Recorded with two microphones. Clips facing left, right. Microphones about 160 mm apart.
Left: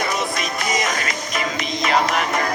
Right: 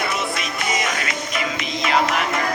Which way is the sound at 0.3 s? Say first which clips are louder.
Left 1 dB; 40° left (ahead or behind).